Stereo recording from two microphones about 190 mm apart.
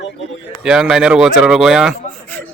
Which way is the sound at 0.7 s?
5° right (ahead or behind).